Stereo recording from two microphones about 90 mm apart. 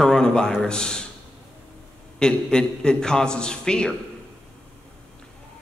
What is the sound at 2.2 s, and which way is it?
A man's voice, 10° left (ahead or behind).